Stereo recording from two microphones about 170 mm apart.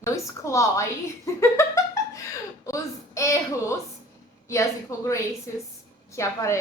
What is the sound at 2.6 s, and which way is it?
A woman's voice, 20° left (ahead or behind).